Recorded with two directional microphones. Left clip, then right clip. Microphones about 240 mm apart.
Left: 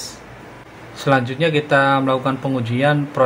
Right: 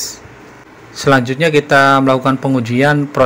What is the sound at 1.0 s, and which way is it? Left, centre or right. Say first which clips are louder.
Speech: right 5 dB; right.